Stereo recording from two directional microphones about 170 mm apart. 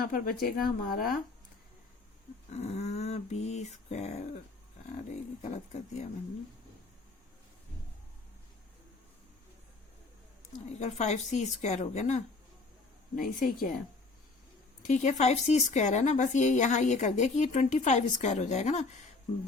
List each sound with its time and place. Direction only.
0.1 s speech: 60° left (ahead or behind)
2.5 s speech: 40° left (ahead or behind)
10.7 s a woman's voice: 40° left (ahead or behind)
13.1 s speech: 55° left (ahead or behind)
14.8 s speech: 45° left (ahead or behind)